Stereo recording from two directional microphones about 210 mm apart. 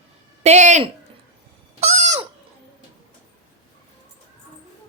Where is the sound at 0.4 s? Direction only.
35° right (ahead or behind).